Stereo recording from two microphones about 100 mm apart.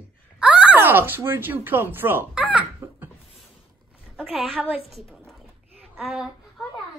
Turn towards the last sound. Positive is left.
turn(degrees=-15)  # may be behind; listen again after turning